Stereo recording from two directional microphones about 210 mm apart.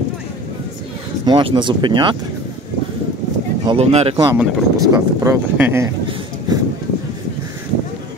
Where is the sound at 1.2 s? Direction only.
20° right (ahead or behind).